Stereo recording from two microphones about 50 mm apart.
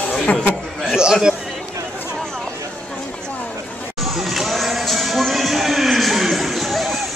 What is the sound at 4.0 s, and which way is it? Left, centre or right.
Music, centre.